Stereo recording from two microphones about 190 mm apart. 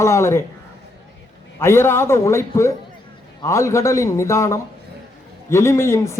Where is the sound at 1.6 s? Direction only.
15° left (ahead or behind).